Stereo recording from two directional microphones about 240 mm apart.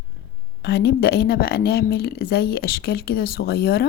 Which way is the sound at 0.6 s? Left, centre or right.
Left.